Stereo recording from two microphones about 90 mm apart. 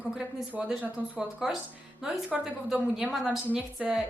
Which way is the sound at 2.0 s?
5° right (ahead or behind).